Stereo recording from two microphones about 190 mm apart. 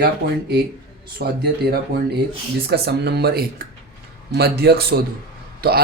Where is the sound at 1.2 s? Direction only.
55° right (ahead or behind).